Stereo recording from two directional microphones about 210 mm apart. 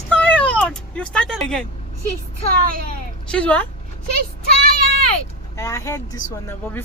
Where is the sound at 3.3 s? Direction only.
5° left (ahead or behind).